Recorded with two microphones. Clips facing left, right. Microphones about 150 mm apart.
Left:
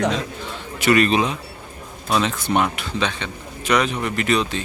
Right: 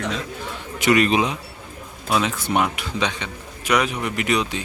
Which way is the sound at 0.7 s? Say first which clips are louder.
Left 1 dB; 20° right (ahead or behind).